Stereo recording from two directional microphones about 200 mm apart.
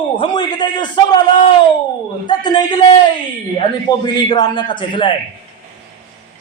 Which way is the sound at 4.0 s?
20° left (ahead or behind).